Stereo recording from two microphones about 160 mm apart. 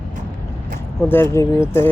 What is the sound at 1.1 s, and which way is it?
Speech, 15° left (ahead or behind).